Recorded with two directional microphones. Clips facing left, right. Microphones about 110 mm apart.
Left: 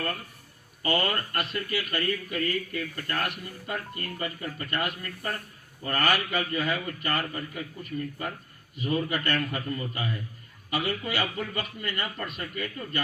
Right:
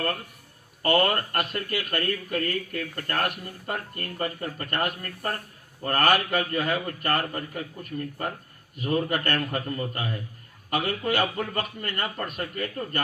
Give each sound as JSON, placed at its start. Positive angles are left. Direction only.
{"t": 0.8, "sound": "speech", "side_deg": -50}